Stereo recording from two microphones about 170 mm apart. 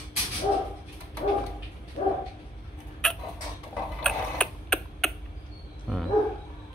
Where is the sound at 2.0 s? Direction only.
45° left (ahead or behind).